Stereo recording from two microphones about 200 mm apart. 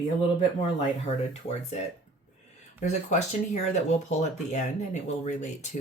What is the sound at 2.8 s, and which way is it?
Speech, 35° left (ahead or behind).